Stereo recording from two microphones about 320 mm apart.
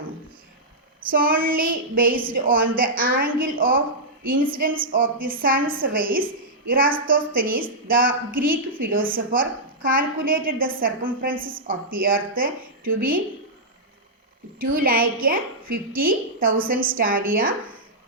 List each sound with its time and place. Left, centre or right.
1.1 s a woman's voice: right
14.6 s a woman's voice: right